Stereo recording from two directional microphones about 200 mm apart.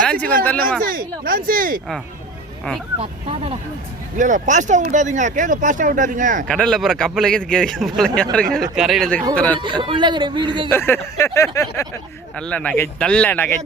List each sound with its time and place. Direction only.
0.0 s speech: 5° left (ahead or behind)
0.8 s speech: 45° right (ahead or behind)
4.2 s speech: 40° right (ahead or behind)
6.5 s speech: 5° left (ahead or behind)
9.6 s speech: 25° right (ahead or behind)
10.7 s speech: 10° left (ahead or behind)